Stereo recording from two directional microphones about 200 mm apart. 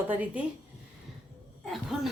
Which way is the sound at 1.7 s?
Centre (ahead or behind).